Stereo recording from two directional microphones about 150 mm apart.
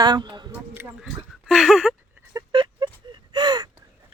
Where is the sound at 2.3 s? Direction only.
35° right (ahead or behind).